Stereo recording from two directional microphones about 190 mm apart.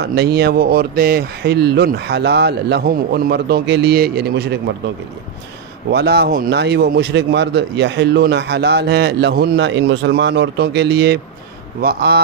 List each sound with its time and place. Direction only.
0.0 s a man's voice: 60° right (ahead or behind)
5.9 s a man's voice: 60° right (ahead or behind)